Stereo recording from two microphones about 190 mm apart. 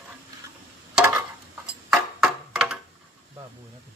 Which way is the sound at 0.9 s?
10° right (ahead or behind).